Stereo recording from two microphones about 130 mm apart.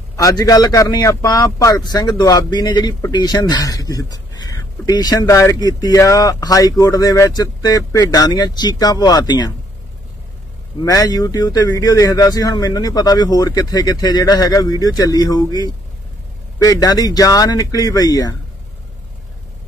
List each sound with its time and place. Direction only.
0.1 s a man's voice: 25° left (ahead or behind)
10.8 s a man's voice: 25° left (ahead or behind)